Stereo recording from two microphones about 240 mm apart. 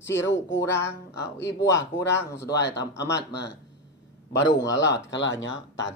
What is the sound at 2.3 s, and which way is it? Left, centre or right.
Speech, left.